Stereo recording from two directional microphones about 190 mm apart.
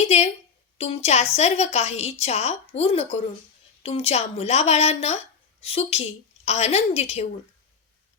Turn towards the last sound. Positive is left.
turn(degrees=35)  # may be behind; listen again after turning